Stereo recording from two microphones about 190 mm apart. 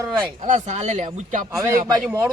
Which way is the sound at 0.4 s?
40° right (ahead or behind).